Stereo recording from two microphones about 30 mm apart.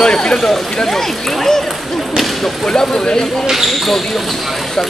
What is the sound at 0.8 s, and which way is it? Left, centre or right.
Speech, centre.